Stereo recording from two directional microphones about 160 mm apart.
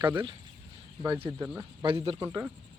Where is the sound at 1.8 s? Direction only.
30° right (ahead or behind).